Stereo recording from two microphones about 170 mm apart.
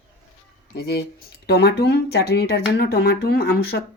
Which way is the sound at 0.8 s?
70° left (ahead or behind).